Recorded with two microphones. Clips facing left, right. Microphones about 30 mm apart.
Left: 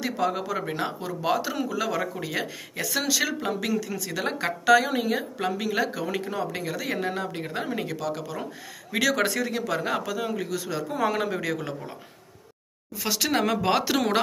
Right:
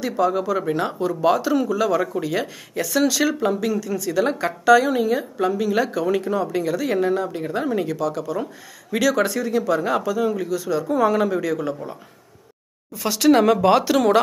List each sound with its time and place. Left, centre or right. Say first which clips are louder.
0.2 s a woman's voice: right 7 dB; left
0.5 s speech: right 7 dB; centre
2.7 s speech: right 7 dB; centre
3.6 s a woman's voice: right 5 dB; left
5.7 s speech: right 6 dB; centre
6.2 s a woman's voice: right 7 dB; left
7.5 s speech: right 8 dB; centre
7.9 s a woman's voice: right 7 dB; left
10.5 s speech: right 7 dB; left
11.1 s a woman's voice: right 6 dB; left
12.9 s speech: right 9 dB; centre